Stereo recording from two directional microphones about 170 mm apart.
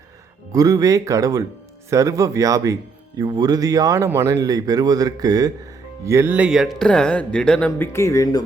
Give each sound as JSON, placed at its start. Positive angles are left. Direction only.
{"t": 0.5, "sound": "speech", "side_deg": -20}